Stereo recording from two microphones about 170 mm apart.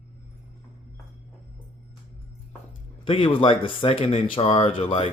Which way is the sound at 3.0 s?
30° left (ahead or behind).